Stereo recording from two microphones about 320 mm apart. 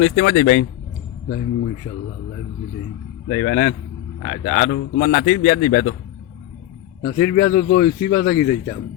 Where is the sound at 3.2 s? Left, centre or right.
Left.